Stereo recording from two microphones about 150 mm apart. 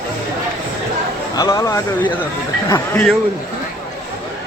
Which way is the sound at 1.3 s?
25° left (ahead or behind).